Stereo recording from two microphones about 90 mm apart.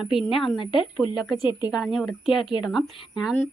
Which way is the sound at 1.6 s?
5° right (ahead or behind).